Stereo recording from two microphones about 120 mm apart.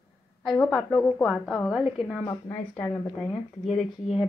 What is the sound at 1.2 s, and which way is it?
Speech, centre (ahead or behind).